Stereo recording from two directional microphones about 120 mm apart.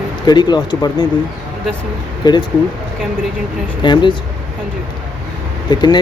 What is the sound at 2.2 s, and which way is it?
Speech, 35° left (ahead or behind).